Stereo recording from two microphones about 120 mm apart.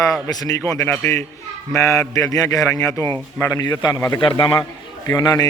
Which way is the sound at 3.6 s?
35° left (ahead or behind).